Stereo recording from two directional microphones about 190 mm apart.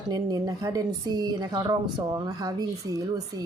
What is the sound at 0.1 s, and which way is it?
A woman's voice, 20° right (ahead or behind).